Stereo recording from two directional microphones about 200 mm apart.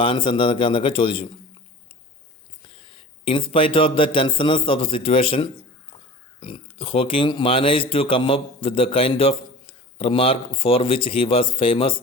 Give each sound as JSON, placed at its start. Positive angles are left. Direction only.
{"t": 0.0, "sound": "speech", "side_deg": 25}
{"t": 2.6, "sound": "a man's voice", "side_deg": 25}